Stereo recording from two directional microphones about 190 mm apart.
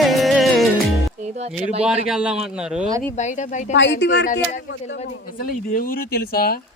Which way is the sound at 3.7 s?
70° left (ahead or behind).